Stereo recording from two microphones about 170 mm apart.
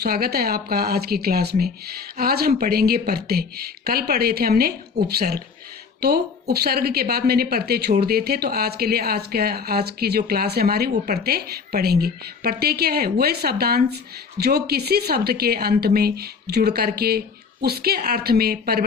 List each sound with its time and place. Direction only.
0.0 s speech: 65° right (ahead or behind)